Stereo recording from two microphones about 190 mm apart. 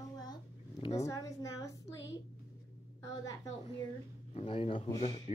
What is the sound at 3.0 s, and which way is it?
Speech, 20° left (ahead or behind).